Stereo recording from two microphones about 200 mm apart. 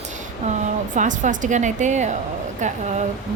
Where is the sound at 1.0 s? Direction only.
40° right (ahead or behind).